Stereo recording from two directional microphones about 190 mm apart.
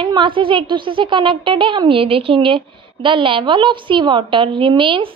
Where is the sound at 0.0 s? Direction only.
25° right (ahead or behind).